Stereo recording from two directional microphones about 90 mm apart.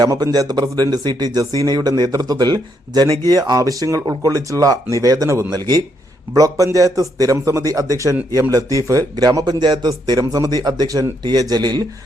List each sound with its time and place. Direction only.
0.0 s speech: 50° right (ahead or behind)